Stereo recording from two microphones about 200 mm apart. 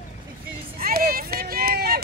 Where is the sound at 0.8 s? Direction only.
50° right (ahead or behind).